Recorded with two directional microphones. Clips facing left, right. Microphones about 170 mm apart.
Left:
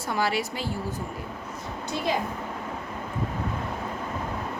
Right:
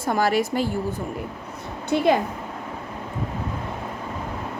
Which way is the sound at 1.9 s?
65° right (ahead or behind).